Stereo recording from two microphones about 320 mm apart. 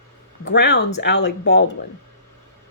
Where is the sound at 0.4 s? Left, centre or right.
Left.